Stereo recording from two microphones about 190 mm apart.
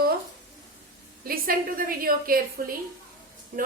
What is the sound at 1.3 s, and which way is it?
A woman's voice, 50° right (ahead or behind).